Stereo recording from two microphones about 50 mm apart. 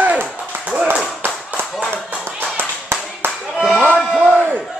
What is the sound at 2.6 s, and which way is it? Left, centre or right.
Clapping, right.